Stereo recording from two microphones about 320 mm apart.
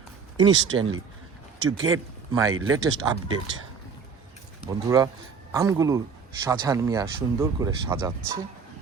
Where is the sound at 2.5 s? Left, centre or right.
Right.